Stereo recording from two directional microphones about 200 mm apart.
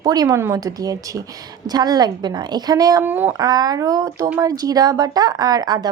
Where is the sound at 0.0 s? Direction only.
20° right (ahead or behind).